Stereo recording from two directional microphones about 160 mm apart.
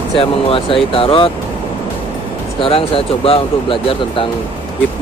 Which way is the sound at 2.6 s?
35° left (ahead or behind).